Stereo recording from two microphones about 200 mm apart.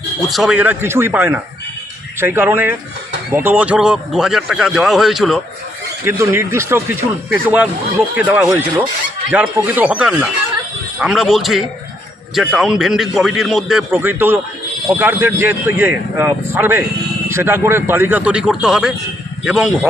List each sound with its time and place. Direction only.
0.2 s a man's voice: centre (ahead or behind)
6.1 s a man's voice: 15° right (ahead or behind)